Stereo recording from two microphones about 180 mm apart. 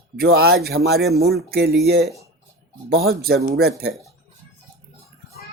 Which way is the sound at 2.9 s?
60° right (ahead or behind).